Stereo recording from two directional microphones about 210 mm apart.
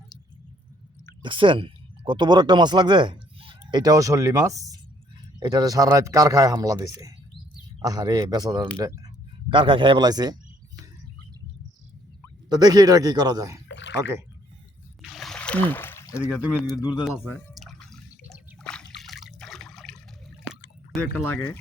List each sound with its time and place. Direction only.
1.2 s a man's voice: 25° right (ahead or behind)
12.5 s a man's voice: 20° right (ahead or behind)
13.7 s a sound: 55° left (ahead or behind)
15.1 s a sound: centre (ahead or behind)
16.4 s speech: 5° right (ahead or behind)
17.0 s drip: 5° left (ahead or behind)
18.6 s trickle: centre (ahead or behind)
21.2 s speech: 10° left (ahead or behind)